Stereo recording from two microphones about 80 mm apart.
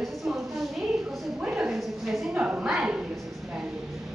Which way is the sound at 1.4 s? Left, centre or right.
Centre.